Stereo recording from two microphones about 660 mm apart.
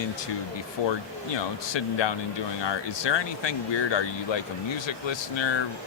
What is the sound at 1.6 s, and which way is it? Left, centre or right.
A man's voice, left.